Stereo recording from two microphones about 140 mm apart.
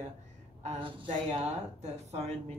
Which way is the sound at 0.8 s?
40° right (ahead or behind).